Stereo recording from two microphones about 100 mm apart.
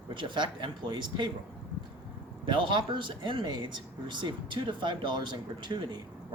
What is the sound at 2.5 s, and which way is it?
Speech, 50° right (ahead or behind).